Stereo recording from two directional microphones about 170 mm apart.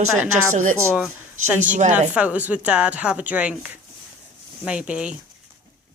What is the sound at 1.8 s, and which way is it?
Speech, 45° right (ahead or behind).